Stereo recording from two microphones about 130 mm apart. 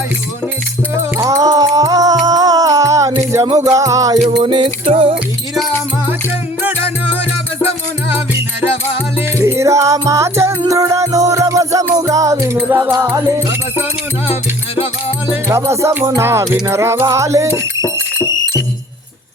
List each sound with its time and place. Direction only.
1.1 s music: 25° right (ahead or behind)
4.2 s music: 65° right (ahead or behind)
4.4 s music: 40° right (ahead or behind)
9.1 s music: 20° right (ahead or behind)
15.4 s music: 20° right (ahead or behind)